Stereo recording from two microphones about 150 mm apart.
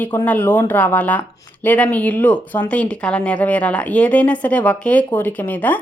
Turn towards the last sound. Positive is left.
turn(degrees=10)  # may be behind; listen again after turning